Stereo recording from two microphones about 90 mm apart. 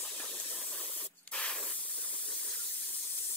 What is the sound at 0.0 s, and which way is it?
Spray, 10° left (ahead or behind).